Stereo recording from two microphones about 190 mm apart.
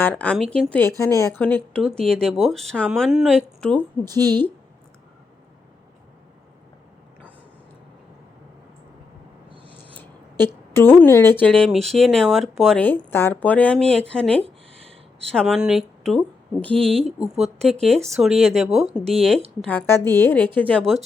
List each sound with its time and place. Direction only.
0.0 s a woman's voice: 10° left (ahead or behind)
9.9 s speech: 10° left (ahead or behind)
14.4 s a sound: 30° right (ahead or behind)
15.3 s a woman's voice: centre (ahead or behind)